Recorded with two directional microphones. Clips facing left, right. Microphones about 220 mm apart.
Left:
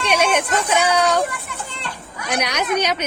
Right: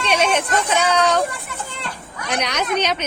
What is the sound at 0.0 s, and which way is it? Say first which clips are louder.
Speech: even; 10° left (ahead or behind).